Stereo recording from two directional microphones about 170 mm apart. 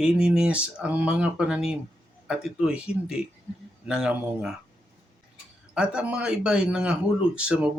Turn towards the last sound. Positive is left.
turn(degrees=-5)  # may be behind; listen again after turning